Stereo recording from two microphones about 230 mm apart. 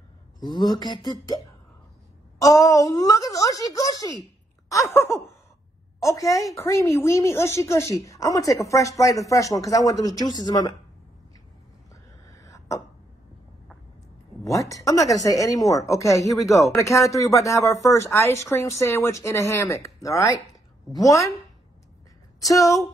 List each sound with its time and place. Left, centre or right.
0.4 s speech: centre
2.4 s speech: centre
4.6 s a sound: centre
5.9 s speech: centre
11.9 s a sound: centre
14.4 s speech: centre
22.4 s speech: centre